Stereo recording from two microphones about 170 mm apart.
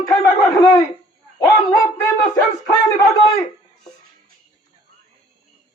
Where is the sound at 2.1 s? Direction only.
20° left (ahead or behind).